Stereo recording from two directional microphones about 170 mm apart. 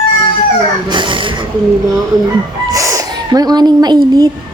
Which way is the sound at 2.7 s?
20° right (ahead or behind).